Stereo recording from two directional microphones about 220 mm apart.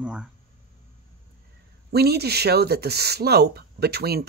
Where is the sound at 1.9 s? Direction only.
45° right (ahead or behind).